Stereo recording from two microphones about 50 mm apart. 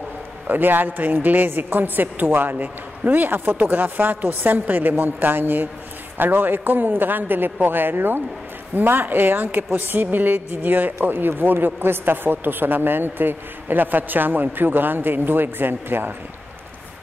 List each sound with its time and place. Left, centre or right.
0.5 s speech: right